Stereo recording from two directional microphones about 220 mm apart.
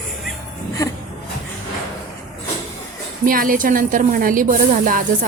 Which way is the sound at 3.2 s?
40° right (ahead or behind).